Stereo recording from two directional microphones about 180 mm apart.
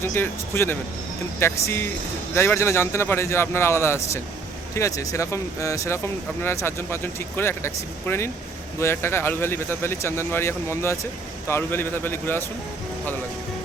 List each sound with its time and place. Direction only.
0.0 s a man's voice: 15° left (ahead or behind)